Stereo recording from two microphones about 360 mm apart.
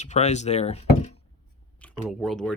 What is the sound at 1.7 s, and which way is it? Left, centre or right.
Speech, centre.